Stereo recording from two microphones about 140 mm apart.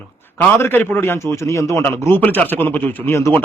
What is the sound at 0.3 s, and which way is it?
A man's voice, 15° left (ahead or behind).